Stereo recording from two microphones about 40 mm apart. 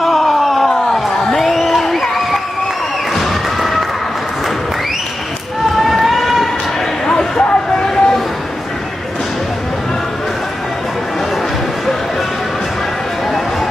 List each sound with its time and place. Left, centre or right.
0.0 s a sound: centre
5.8 s run: centre
7.1 s vehicle: centre